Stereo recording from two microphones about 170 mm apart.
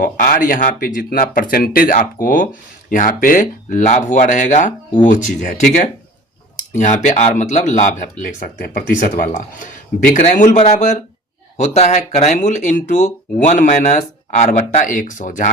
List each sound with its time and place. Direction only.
0.0 s speech: 50° left (ahead or behind)